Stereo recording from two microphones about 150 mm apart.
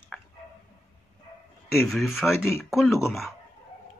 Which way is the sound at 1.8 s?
Centre (ahead or behind).